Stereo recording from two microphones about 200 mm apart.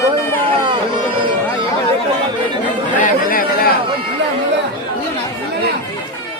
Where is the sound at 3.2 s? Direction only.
45° left (ahead or behind).